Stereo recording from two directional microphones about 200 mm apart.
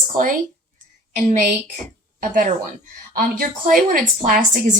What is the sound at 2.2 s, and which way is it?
A woman's voice, 40° right (ahead or behind).